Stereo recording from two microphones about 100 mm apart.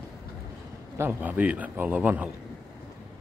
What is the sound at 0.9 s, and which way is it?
A man's voice, 25° right (ahead or behind).